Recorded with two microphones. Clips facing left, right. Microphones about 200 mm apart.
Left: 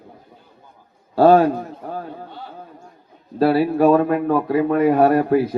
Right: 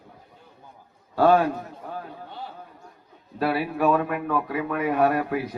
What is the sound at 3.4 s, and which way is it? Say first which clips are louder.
A man's voice: left 8 dB; 30° left (ahead or behind).